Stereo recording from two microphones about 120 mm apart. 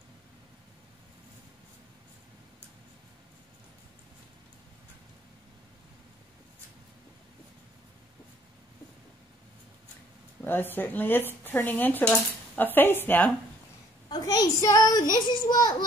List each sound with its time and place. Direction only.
10.4 s speech: 15° left (ahead or behind)
14.0 s a child's voice: 30° left (ahead or behind)